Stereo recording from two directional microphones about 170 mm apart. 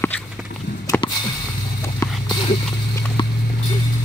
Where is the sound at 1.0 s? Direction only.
30° left (ahead or behind).